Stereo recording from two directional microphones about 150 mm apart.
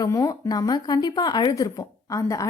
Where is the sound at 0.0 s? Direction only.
25° left (ahead or behind).